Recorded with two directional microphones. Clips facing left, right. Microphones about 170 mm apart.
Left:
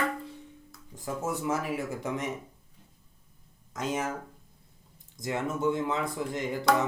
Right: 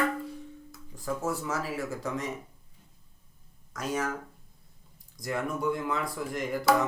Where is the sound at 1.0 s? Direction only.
20° left (ahead or behind).